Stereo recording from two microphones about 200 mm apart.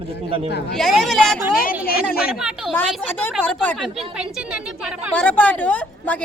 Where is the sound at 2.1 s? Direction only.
50° left (ahead or behind).